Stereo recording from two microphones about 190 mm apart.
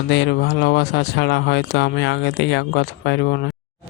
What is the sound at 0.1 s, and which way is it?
Speech, 65° left (ahead or behind).